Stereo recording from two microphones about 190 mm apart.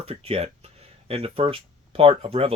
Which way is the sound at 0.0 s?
30° right (ahead or behind).